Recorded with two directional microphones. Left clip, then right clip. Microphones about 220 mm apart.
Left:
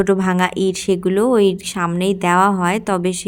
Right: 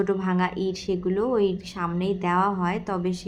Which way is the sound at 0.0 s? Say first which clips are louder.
Left 8 dB; 40° left (ahead or behind).